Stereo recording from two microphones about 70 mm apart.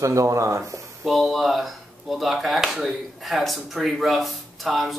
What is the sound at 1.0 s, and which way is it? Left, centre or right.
Speech, centre.